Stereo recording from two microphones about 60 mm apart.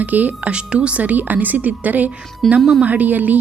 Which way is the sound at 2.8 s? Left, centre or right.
Right.